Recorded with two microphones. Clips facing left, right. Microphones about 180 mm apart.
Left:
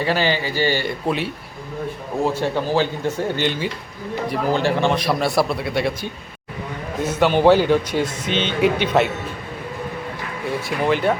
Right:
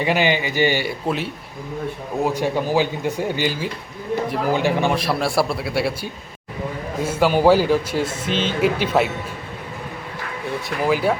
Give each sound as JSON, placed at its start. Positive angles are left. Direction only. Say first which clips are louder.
{"t": 0.0, "sound": "a man's voice", "louder": "right 1 dB", "side_deg": -15}
{"t": 1.0, "sound": "a man's voice", "louder": "left 3 dB", "side_deg": 0}
{"t": 2.2, "sound": "a man's voice", "louder": "even", "side_deg": -10}
{"t": 4.9, "sound": "a man's voice", "louder": "left 1 dB", "side_deg": 0}
{"t": 10.7, "sound": "a man's voice", "louder": "even", "side_deg": -5}